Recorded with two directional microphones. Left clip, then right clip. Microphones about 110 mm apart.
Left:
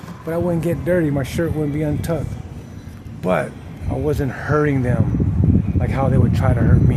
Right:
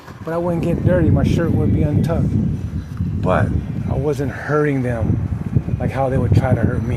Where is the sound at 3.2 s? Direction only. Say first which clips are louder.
Right 1 dB; 30° left (ahead or behind).